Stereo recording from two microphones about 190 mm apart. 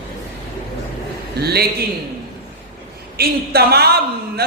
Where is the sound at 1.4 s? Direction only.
55° right (ahead or behind).